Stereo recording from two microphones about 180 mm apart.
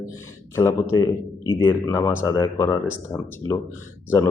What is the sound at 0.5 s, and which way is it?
A man's voice, 15° left (ahead or behind).